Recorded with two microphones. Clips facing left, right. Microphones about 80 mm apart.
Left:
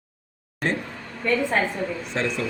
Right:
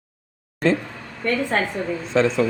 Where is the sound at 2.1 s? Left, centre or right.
Right.